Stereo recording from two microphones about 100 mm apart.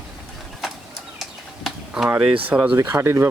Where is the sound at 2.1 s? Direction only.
10° right (ahead or behind).